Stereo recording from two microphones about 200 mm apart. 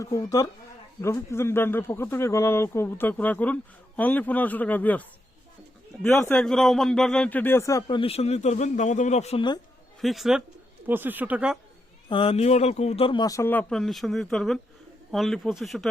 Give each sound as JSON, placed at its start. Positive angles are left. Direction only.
{"t": 0.0, "sound": "speech", "side_deg": 15}
{"t": 10.0, "sound": "speech", "side_deg": 0}
{"t": 12.0, "sound": "speech", "side_deg": 25}